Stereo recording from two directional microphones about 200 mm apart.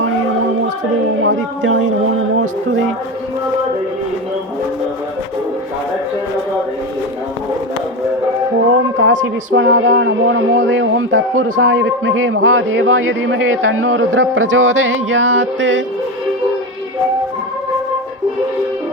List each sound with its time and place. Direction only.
1.2 s speech: 75° right (ahead or behind)
9.0 s a man's voice: 75° right (ahead or behind)